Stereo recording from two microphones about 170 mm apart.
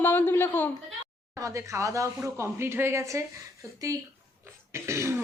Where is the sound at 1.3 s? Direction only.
15° right (ahead or behind).